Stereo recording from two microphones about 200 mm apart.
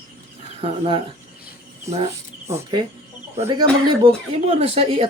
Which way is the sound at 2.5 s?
20° right (ahead or behind).